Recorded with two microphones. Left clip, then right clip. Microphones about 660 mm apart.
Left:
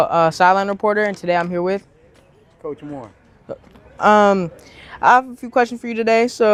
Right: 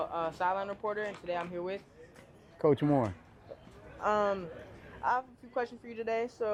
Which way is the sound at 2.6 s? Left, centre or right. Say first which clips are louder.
Right 2 dB; right.